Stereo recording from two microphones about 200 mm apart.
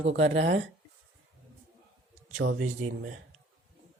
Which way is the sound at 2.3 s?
80° right.